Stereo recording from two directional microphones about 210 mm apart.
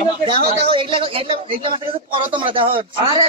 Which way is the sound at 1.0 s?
25° right (ahead or behind).